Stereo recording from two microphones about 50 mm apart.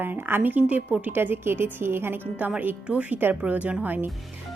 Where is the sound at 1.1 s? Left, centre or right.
Right.